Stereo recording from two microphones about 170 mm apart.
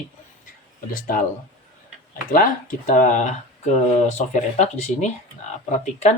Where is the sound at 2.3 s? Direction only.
55° left (ahead or behind).